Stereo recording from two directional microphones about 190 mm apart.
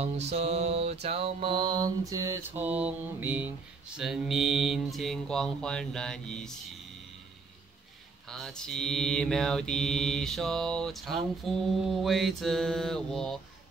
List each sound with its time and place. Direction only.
0.0 s mantra: 35° right (ahead or behind); by 6.5 s 5° left (ahead or behind)
8.3 s mantra: centre (ahead or behind)